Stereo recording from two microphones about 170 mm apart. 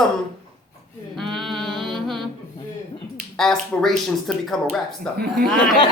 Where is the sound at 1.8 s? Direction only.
Centre (ahead or behind).